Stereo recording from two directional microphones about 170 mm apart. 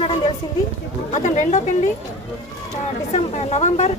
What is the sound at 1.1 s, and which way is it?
Speech, 45° left (ahead or behind).